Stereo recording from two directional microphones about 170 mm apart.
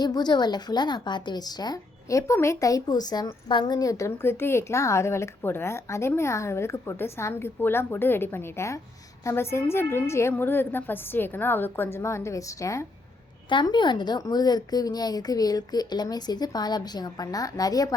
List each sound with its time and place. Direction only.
0.0 s a woman's voice: 25° left (ahead or behind)